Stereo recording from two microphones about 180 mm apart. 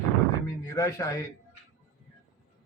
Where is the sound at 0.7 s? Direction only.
15° left (ahead or behind).